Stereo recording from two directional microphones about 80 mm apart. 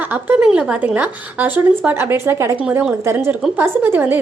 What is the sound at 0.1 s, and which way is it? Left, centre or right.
A woman's voice, right.